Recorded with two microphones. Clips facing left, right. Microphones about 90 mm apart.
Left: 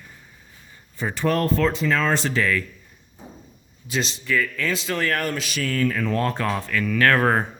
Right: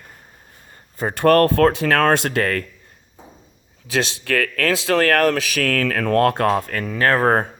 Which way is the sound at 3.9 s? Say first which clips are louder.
Right 3 dB; 75° right (ahead or behind).